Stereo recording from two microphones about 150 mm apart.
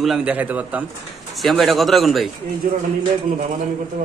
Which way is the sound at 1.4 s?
Centre (ahead or behind).